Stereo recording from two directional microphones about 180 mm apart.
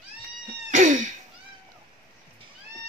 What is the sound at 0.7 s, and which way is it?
Cough, 45° right (ahead or behind).